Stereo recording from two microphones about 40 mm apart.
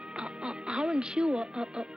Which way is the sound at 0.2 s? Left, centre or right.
Centre.